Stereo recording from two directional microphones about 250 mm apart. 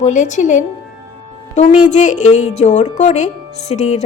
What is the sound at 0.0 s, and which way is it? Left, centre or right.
A woman's voice, left.